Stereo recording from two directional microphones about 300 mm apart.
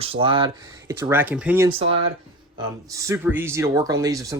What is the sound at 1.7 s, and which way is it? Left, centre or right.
Speech, centre.